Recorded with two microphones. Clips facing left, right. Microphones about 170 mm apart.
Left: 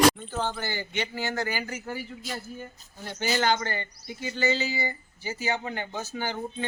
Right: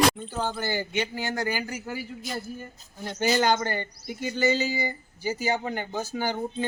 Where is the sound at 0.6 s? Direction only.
45° right (ahead or behind).